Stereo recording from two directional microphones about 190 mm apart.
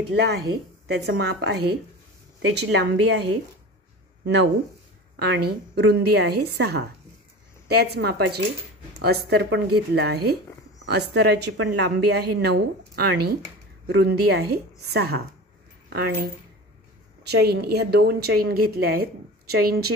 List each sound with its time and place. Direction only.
0.1 s a woman's voice: 60° right (ahead or behind)
17.3 s a woman's voice: 55° right (ahead or behind)